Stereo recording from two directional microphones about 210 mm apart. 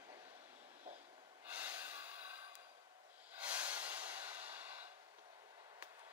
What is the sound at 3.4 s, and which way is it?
Snort, 5° right (ahead or behind).